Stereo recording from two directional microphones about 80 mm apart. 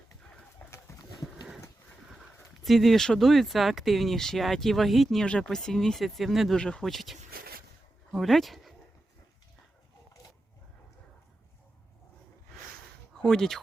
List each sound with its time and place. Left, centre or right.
0.2 s pigeon: centre
0.9 s a sound: left
2.6 s speech: centre
5.2 s speech: centre
6.6 s speech: centre
6.9 s speech: centre
13.2 s speech: centre